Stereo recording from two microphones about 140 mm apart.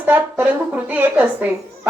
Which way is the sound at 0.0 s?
15° right (ahead or behind).